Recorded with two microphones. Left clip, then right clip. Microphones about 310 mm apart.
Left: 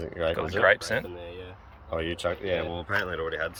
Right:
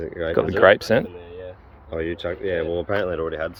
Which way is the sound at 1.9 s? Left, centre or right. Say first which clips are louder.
Right 3 dB; left.